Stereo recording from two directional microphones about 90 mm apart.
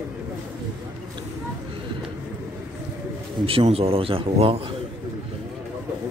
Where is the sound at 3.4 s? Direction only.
90° right.